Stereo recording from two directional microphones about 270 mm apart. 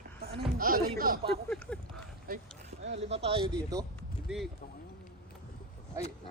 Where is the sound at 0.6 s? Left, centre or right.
Right.